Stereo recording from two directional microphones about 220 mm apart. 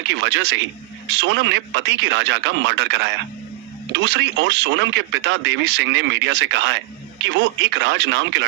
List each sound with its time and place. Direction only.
0.1 s speech: 55° right (ahead or behind)